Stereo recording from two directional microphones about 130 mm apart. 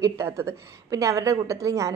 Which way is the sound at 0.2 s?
20° right (ahead or behind).